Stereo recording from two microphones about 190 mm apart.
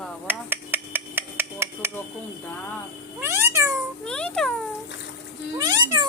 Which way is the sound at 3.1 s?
15° right (ahead or behind).